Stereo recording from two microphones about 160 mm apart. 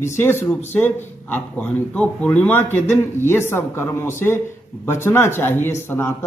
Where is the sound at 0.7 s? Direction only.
10° left (ahead or behind).